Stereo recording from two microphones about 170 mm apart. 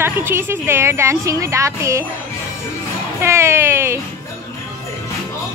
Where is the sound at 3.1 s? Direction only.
15° right (ahead or behind).